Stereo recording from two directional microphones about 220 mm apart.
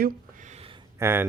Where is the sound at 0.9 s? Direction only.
10° right (ahead or behind).